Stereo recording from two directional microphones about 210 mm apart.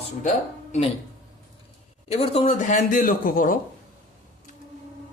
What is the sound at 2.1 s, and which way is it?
A man's voice, 30° left (ahead or behind).